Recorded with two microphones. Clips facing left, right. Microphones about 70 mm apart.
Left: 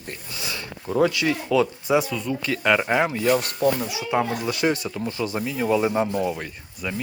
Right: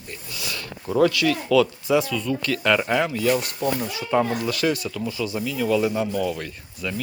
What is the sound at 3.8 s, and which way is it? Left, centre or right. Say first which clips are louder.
Speech: right 1 dB; centre.